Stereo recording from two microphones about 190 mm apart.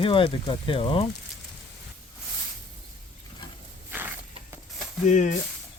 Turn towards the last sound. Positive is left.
turn(degrees=40)  # may be behind; listen again after turning